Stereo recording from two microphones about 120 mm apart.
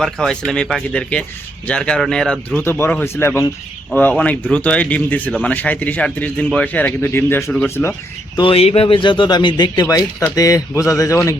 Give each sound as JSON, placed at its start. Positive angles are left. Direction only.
{"t": 0.0, "sound": "a man's voice", "side_deg": 5}
{"t": 2.6, "sound": "a man's voice", "side_deg": 20}
{"t": 7.5, "sound": "a man's voice", "side_deg": 10}
{"t": 8.4, "sound": "speech", "side_deg": 50}
{"t": 9.8, "sound": "speech", "side_deg": 25}